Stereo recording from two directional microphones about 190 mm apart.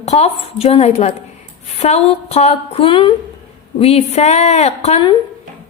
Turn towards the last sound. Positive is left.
turn(degrees=30)  # may be behind; listen again after turning